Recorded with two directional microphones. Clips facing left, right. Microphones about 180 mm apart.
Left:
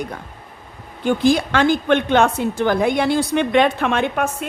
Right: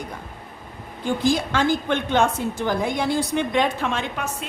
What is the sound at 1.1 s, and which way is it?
A woman's voice, 70° left (ahead or behind).